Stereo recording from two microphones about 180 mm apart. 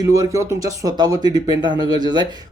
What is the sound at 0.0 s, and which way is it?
Speech, 20° right (ahead or behind).